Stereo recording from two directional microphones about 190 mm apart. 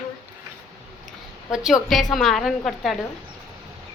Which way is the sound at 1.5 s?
Centre (ahead or behind).